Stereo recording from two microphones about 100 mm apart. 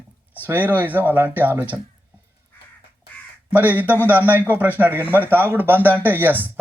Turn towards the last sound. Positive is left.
turn(degrees=-20)  # may be behind; listen again after turning